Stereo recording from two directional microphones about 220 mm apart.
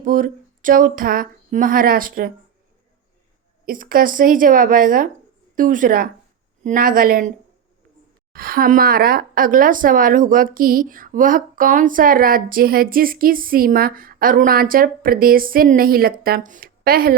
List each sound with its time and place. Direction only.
0.0 s speech: 40° right (ahead or behind)
3.7 s a woman's voice: 40° right (ahead or behind)